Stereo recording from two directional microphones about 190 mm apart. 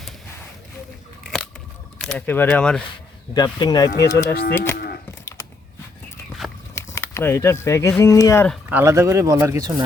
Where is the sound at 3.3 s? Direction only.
20° left (ahead or behind).